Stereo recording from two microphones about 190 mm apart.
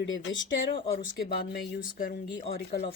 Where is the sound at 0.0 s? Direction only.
75° left (ahead or behind).